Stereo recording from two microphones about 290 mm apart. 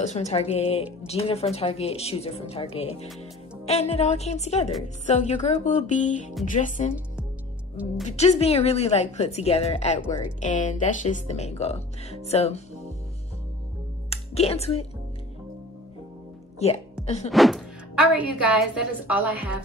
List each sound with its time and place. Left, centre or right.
0.0 s speech: left
8.0 s speech: left
14.1 s speech: left
16.5 s speech: left
17.3 s a woman's voice: centre